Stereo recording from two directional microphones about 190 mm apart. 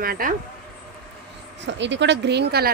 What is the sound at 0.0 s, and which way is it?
Speech, 50° right (ahead or behind).